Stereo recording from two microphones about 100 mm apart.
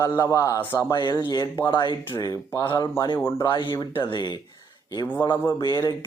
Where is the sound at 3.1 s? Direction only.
25° left (ahead or behind).